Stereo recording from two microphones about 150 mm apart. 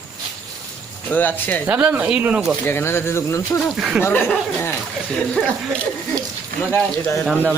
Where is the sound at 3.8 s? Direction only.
5° right (ahead or behind).